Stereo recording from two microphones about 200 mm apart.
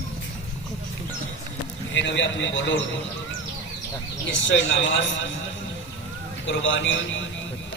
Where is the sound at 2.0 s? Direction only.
65° left (ahead or behind).